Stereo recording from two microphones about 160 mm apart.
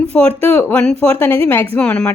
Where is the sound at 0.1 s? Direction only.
10° left (ahead or behind).